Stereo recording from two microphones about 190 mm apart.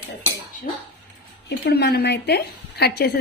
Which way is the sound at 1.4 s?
60° left (ahead or behind).